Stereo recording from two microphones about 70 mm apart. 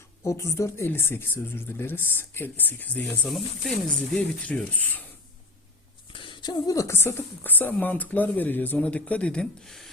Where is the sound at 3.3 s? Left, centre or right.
Centre; by 5.0 s left.